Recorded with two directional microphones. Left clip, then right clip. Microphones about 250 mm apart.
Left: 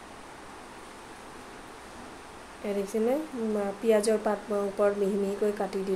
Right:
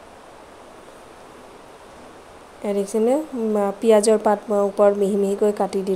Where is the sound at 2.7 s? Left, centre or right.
Right.